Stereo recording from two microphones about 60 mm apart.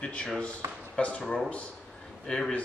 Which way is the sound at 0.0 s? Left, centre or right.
Centre.